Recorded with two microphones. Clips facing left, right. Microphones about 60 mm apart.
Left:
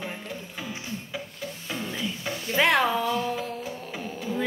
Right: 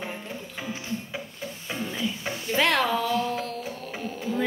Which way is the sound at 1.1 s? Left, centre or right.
Right.